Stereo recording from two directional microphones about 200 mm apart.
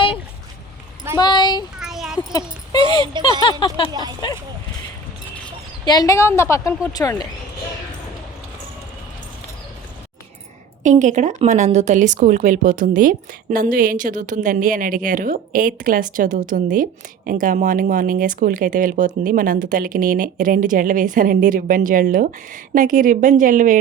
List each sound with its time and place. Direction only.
1.2 s speech: 20° left (ahead or behind)
1.8 s a sound: centre (ahead or behind)
3.1 s a sound: 25° right (ahead or behind)
3.8 s speech: 25° left (ahead or behind)
5.8 s speech: 20° left (ahead or behind)
10.8 s speech: 35° right (ahead or behind)